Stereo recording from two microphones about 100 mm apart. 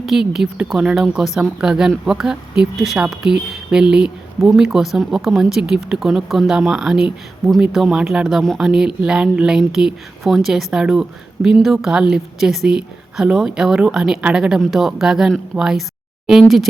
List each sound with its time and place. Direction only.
0.0 s a woman's voice: 5° right (ahead or behind)